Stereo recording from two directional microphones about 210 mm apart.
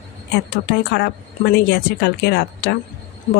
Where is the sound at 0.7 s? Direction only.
50° left (ahead or behind).